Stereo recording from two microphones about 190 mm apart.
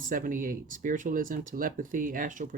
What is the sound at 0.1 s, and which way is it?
Speech, 45° right (ahead or behind).